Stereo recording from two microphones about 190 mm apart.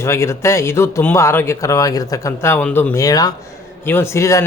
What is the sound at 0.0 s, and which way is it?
A man's voice, 15° left (ahead or behind).